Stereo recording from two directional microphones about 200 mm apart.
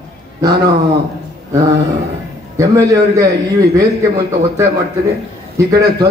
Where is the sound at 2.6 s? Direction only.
15° right (ahead or behind).